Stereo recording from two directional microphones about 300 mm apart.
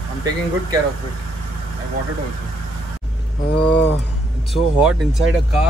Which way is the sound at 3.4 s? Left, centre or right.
Left.